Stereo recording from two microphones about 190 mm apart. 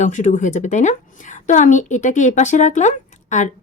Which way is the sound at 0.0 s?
40° left (ahead or behind).